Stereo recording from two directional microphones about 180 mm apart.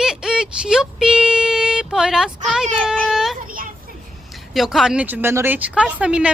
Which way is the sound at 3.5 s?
50° right (ahead or behind).